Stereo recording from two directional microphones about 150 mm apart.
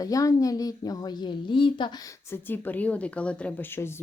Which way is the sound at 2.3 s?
10° left (ahead or behind).